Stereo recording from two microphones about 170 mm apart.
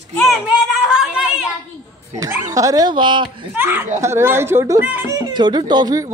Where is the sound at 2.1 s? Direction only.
20° right (ahead or behind).